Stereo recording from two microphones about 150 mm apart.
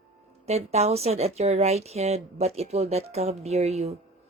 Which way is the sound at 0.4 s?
45° right (ahead or behind).